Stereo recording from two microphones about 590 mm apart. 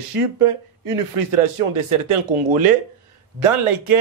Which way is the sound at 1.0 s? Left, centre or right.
Right.